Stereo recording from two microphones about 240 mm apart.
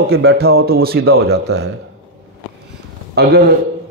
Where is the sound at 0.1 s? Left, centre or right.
Right.